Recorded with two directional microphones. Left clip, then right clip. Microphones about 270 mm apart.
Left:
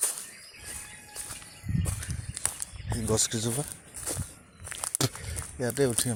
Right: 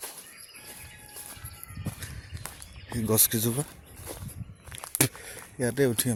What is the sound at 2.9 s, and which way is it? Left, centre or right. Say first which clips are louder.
Speech: right 1 dB; right.